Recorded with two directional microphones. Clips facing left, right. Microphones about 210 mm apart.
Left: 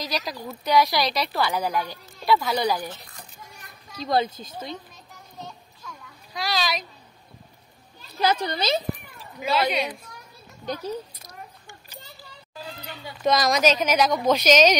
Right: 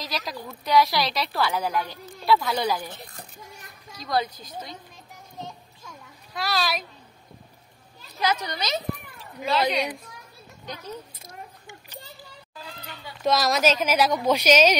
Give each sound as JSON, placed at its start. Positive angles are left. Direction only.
{"t": 0.0, "sound": "a woman's voice", "side_deg": 0}
{"t": 4.0, "sound": "speech", "side_deg": 25}
{"t": 6.3, "sound": "a woman's voice", "side_deg": -5}
{"t": 8.2, "sound": "speech", "side_deg": 30}
{"t": 9.4, "sound": "a woman's voice", "side_deg": 0}
{"t": 13.2, "sound": "a woman's voice", "side_deg": 0}